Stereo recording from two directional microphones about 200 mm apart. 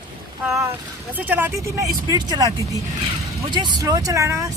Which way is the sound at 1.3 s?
10° right (ahead or behind).